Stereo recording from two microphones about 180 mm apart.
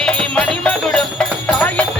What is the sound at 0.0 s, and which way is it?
Music, 5° left (ahead or behind).